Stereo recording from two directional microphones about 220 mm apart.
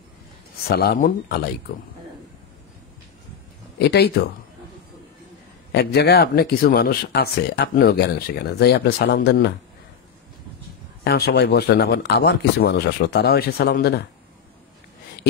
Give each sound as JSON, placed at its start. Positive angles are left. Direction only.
{"t": 0.7, "sound": "speech", "side_deg": 45}
{"t": 3.7, "sound": "speech", "side_deg": 45}
{"t": 5.7, "sound": "speech", "side_deg": 50}
{"t": 11.1, "sound": "speech", "side_deg": 45}